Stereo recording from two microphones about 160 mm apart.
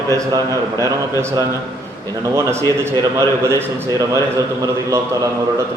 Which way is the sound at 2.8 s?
15° right (ahead or behind).